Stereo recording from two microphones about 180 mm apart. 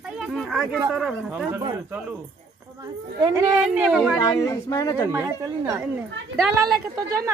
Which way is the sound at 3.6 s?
5° right (ahead or behind).